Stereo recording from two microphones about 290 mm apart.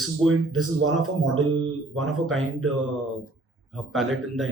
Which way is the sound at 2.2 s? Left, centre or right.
Centre.